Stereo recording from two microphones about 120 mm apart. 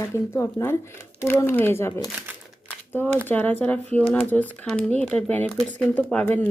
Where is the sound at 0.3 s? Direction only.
20° left (ahead or behind).